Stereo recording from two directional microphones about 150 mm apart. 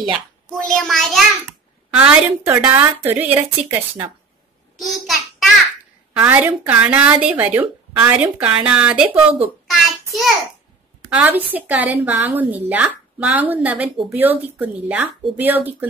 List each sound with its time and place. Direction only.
0.6 s a child's voice: 5° left (ahead or behind)
1.9 s a woman's voice: 10° right (ahead or behind)
4.7 s a sound: centre (ahead or behind)
6.1 s a woman's voice: 10° right (ahead or behind)
9.1 s speech: 40° right (ahead or behind)
9.7 s child singing: centre (ahead or behind)
11.1 s a woman's voice: 10° right (ahead or behind)